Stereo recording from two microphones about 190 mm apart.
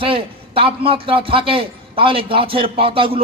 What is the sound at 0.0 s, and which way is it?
A man's voice, 30° right (ahead or behind).